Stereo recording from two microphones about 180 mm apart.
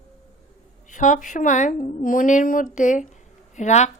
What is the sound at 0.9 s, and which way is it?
A woman's voice, 45° left (ahead or behind).